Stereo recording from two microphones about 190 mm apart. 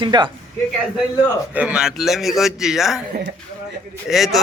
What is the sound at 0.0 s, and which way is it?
Speech, 25° right (ahead or behind).